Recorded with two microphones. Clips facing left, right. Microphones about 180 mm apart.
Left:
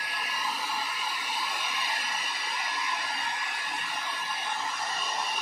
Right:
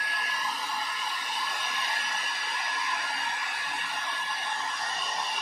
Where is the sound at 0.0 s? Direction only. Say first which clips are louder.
Even; 5° left (ahead or behind).